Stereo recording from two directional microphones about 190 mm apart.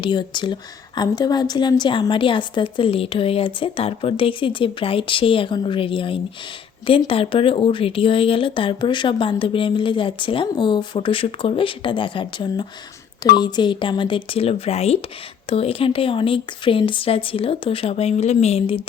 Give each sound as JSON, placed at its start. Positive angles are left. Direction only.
{"t": 0.0, "sound": "a woman's voice", "side_deg": 25}